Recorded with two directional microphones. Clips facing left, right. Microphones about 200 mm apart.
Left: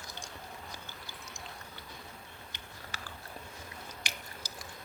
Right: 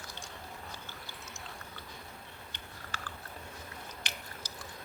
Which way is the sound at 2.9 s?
15° left (ahead or behind).